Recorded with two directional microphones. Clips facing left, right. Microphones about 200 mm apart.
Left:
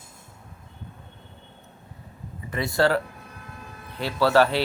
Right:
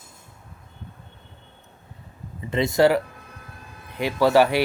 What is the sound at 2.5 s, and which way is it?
Speech, 20° right (ahead or behind).